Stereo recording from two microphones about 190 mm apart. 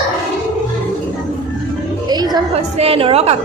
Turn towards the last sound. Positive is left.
turn(degrees=-30)  # may be behind; listen again after turning